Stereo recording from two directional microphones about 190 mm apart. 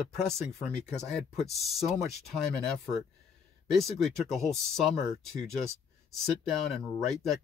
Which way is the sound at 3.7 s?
Centre (ahead or behind).